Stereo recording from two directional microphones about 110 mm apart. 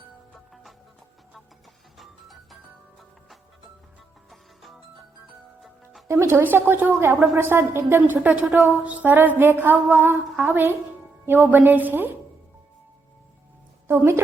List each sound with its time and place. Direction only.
0.3 s music: centre (ahead or behind)
2.0 s music: centre (ahead or behind)
6.1 s a woman's voice: 25° right (ahead or behind)
8.8 s music: 15° right (ahead or behind)
13.8 s a woman's voice: 20° right (ahead or behind)